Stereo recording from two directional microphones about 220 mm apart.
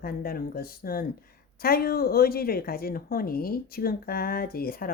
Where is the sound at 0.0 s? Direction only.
45° left (ahead or behind).